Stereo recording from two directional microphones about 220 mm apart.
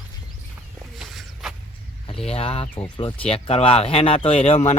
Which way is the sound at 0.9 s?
Centre (ahead or behind).